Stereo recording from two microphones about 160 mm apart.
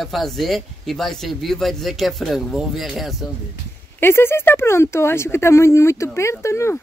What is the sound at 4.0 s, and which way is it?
Speech, 15° left (ahead or behind).